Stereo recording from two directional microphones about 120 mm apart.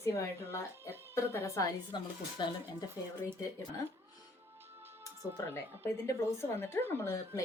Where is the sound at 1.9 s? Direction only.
40° left (ahead or behind).